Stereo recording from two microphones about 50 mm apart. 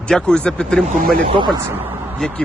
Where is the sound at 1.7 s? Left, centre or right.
Right.